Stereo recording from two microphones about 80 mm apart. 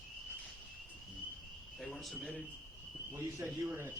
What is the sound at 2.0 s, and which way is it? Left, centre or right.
Speech, centre.